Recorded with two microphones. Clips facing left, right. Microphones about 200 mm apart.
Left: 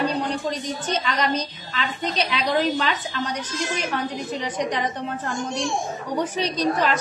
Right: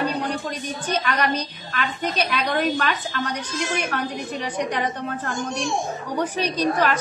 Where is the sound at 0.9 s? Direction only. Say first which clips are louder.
Right 2 dB; 60° right (ahead or behind).